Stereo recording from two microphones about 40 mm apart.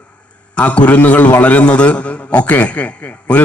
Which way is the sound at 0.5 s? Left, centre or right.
Left.